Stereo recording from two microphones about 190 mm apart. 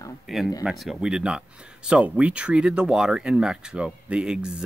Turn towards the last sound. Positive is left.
turn(degrees=-5)  # may be behind; listen again after turning